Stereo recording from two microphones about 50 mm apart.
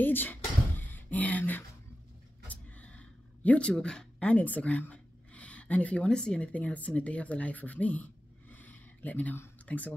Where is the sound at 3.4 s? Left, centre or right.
Left.